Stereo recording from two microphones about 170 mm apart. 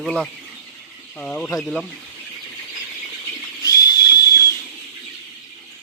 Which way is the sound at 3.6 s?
20° left (ahead or behind).